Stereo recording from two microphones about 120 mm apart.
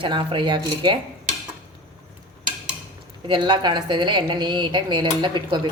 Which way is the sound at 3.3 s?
40° right (ahead or behind).